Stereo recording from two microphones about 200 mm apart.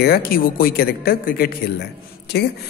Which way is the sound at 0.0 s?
50° left (ahead or behind).